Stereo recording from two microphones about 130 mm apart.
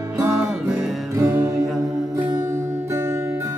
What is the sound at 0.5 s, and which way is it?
Music, 5° right (ahead or behind).